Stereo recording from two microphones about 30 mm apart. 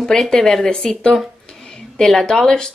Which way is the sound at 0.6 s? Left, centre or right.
Left.